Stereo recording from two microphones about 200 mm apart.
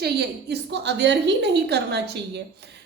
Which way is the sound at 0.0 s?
55° right (ahead or behind).